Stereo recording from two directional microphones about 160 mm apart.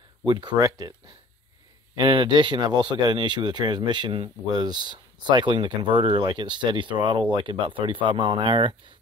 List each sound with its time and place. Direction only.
0.3 s speech: 30° right (ahead or behind)
2.0 s speech: 30° right (ahead or behind)